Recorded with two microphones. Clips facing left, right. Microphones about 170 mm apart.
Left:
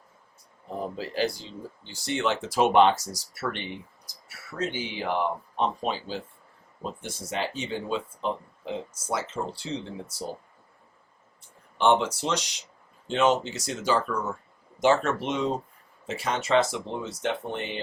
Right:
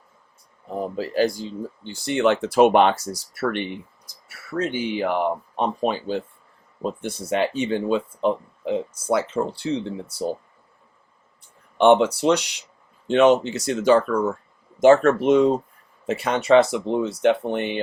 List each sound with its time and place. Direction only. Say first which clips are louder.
0.9 s speech: right 8 dB; 45° right (ahead or behind)
11.8 s speech: right 7 dB; 60° right (ahead or behind)
14.8 s speech: right 8 dB; 50° right (ahead or behind)
16.0 s speech: right 8 dB; 60° right (ahead or behind)